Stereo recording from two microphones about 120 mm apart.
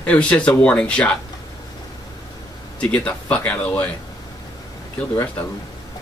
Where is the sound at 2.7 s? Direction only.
10° left (ahead or behind).